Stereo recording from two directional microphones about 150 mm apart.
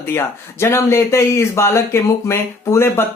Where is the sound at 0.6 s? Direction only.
15° left (ahead or behind).